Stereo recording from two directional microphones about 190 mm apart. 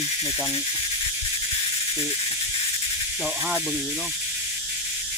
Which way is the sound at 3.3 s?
5° right (ahead or behind).